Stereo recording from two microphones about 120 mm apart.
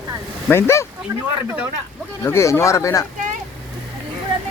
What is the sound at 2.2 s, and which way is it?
Speech, 25° left (ahead or behind).